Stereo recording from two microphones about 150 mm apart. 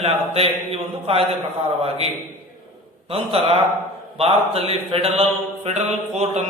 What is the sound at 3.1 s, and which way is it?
A man's voice, 40° right (ahead or behind).